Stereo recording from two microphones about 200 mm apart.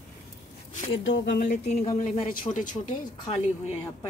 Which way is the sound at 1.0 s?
60° left (ahead or behind).